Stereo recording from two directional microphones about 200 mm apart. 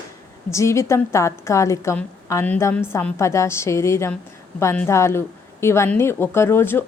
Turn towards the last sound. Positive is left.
turn(degrees=10)  # may be behind; listen again after turning